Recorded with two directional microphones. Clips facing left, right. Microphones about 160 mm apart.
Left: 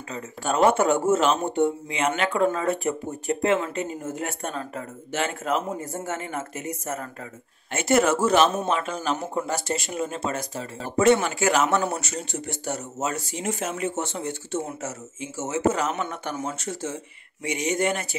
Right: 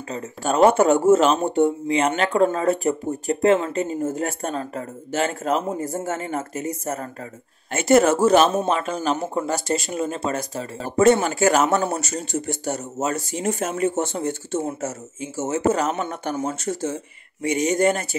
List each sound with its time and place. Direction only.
0.1 s speech: 40° right (ahead or behind)